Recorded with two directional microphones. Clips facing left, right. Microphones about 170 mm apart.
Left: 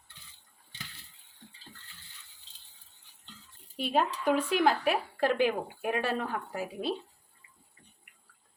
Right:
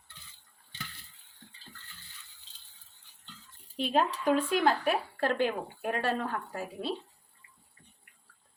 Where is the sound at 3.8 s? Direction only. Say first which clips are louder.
Right 1 dB; 5° left (ahead or behind).